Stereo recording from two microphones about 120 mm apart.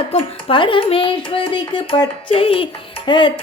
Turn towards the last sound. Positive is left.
turn(degrees=40)  # may be behind; listen again after turning